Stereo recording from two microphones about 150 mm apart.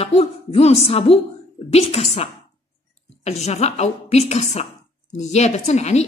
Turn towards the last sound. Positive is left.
turn(degrees=45)  # may be behind; listen again after turning